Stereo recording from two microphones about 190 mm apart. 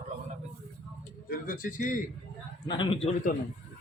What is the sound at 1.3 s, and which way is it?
Speech, 45° left (ahead or behind).